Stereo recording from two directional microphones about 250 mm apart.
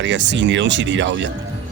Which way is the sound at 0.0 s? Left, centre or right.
Right.